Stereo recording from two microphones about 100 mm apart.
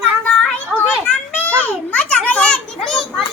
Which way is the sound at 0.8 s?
15° left (ahead or behind).